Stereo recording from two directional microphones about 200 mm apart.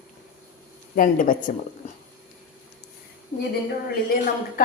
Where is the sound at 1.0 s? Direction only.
45° left (ahead or behind).